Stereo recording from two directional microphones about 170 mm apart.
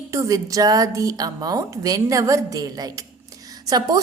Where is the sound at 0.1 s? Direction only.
20° right (ahead or behind).